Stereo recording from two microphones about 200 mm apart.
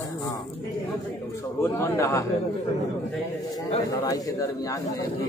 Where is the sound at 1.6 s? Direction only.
15° left (ahead or behind).